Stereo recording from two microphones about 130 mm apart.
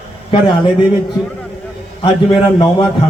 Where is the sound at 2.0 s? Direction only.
40° left (ahead or behind).